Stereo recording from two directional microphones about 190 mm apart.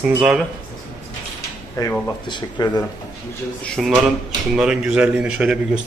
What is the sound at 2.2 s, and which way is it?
Speech, 25° left (ahead or behind).